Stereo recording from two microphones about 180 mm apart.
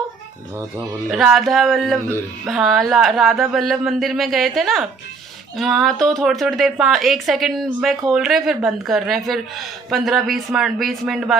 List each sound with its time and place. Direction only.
1.1 s speech: centre (ahead or behind)